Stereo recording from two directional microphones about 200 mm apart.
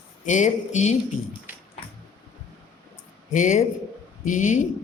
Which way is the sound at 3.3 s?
35° left (ahead or behind).